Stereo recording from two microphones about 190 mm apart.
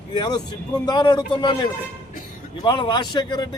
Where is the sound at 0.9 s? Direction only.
20° left (ahead or behind).